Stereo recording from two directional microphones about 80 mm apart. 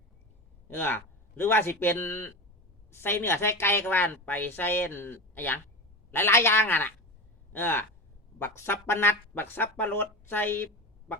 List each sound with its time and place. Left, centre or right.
0.7 s a woman's voice: left